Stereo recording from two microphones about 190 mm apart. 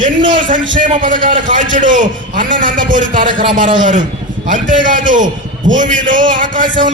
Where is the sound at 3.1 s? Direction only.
25° right (ahead or behind).